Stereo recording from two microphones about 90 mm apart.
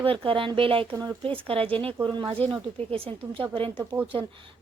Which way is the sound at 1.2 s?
90° right.